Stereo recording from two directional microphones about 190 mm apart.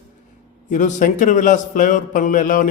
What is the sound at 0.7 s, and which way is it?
A man's voice, 40° left (ahead or behind).